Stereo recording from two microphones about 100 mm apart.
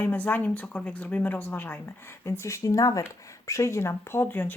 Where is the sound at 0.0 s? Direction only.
15° left (ahead or behind).